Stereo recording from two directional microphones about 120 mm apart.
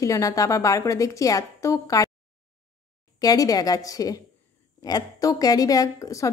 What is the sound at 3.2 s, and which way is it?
A woman's voice, 30° left (ahead or behind).